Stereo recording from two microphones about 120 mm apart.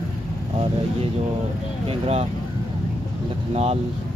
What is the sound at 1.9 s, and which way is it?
Speech, 55° right (ahead or behind).